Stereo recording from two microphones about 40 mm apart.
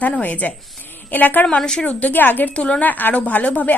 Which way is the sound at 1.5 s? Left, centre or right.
Left.